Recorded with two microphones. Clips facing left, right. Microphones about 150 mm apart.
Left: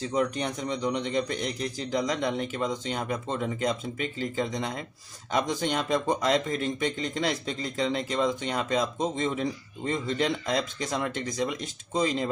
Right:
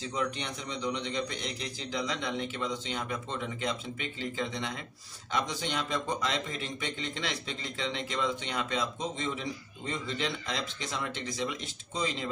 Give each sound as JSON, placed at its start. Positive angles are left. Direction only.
{"t": 0.1, "sound": "speech", "side_deg": 45}